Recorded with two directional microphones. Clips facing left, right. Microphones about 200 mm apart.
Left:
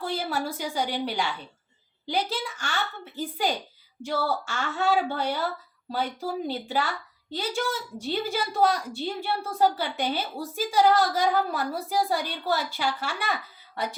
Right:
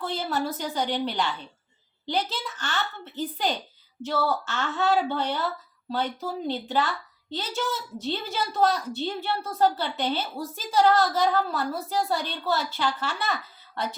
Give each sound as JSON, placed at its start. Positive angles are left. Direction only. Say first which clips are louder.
{"t": 0.0, "sound": "a woman's voice", "louder": "right 1 dB", "side_deg": 10}